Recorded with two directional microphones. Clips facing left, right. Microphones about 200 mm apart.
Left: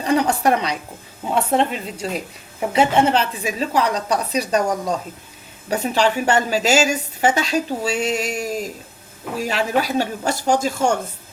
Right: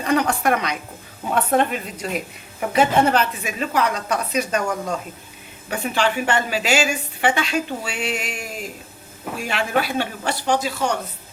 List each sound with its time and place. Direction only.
0.0 s a woman's voice: 30° left (ahead or behind)
1.2 s a sound: 20° left (ahead or behind)
1.5 s a woman's voice: 25° left (ahead or behind); by 10.9 s 45° left (ahead or behind)